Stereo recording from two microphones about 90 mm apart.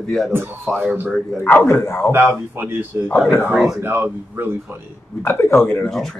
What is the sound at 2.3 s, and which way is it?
Speech, 25° right (ahead or behind).